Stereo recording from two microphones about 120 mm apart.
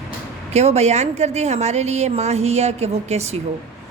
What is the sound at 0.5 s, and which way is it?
A woman's voice, 65° right (ahead or behind).